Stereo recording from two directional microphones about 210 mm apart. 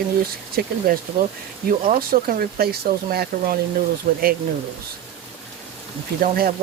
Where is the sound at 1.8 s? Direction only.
40° right (ahead or behind).